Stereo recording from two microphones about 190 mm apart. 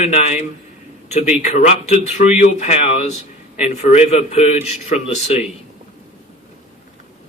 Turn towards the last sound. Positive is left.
turn(degrees=35)  # may be behind; listen again after turning